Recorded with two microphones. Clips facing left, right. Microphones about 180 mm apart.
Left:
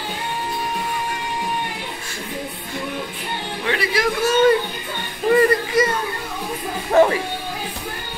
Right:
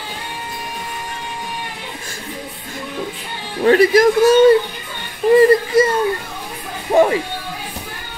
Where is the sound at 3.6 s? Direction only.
45° right (ahead or behind).